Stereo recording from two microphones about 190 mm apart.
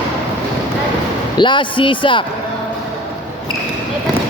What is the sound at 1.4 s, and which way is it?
Speech, 25° left (ahead or behind).